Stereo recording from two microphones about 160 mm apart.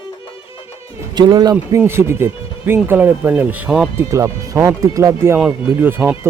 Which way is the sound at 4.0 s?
20° right (ahead or behind).